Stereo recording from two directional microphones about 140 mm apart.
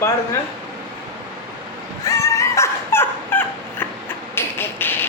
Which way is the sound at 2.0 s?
20° left (ahead or behind).